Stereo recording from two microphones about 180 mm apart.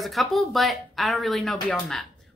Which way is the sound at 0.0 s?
Centre (ahead or behind).